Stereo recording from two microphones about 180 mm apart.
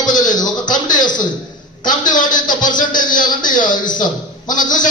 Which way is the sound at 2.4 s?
25° left (ahead or behind).